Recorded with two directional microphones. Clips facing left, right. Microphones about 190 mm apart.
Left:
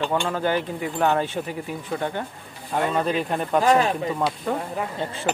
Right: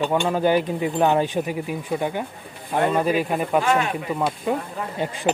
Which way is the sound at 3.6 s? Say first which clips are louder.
Left 3 dB; 35° left (ahead or behind).